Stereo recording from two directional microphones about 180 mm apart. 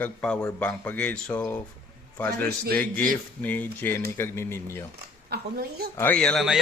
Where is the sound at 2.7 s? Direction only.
5° left (ahead or behind).